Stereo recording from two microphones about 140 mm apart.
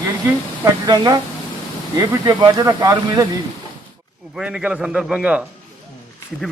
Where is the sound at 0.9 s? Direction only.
30° right (ahead or behind).